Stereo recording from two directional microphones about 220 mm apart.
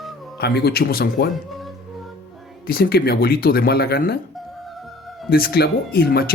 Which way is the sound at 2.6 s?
45° left (ahead or behind).